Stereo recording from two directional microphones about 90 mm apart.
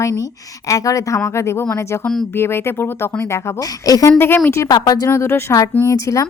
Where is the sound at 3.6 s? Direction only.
40° left (ahead or behind).